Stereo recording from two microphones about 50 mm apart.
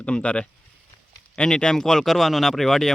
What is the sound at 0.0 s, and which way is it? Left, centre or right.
Speech, left.